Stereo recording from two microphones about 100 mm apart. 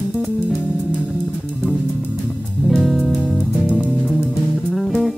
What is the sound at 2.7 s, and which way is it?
Music, centre (ahead or behind).